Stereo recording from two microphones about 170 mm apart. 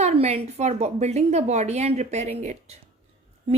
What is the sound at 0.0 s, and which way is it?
Speech, 40° right (ahead or behind).